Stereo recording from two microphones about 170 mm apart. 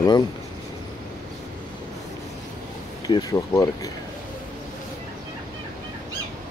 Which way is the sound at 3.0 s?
20° left (ahead or behind).